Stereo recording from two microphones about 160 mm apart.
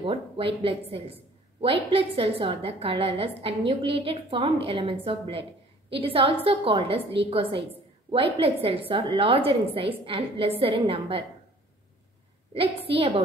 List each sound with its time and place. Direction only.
0.0 s speech: 35° right (ahead or behind)
12.5 s speech: 35° right (ahead or behind)